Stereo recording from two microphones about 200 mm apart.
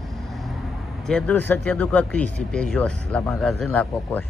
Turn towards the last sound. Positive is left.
turn(degrees=10)  # may be behind; listen again after turning